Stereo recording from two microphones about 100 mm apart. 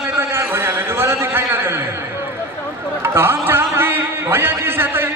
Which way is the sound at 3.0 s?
25° right (ahead or behind).